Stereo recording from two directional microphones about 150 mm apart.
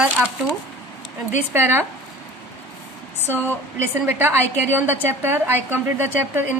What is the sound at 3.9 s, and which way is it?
A woman's voice, 15° right (ahead or behind).